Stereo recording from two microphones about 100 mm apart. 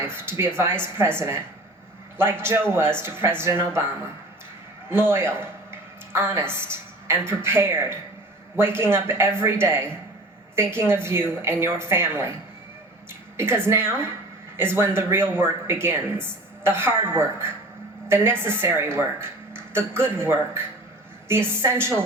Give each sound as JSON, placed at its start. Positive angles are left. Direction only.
{"t": 0.0, "sound": "speech", "side_deg": -25}
{"t": 13.3, "sound": "speech", "side_deg": -25}